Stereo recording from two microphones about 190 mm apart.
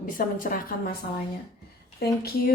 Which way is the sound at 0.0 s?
45° left (ahead or behind).